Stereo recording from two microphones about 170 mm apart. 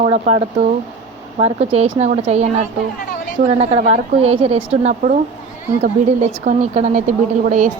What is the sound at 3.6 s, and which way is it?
A woman's voice, 40° right (ahead or behind).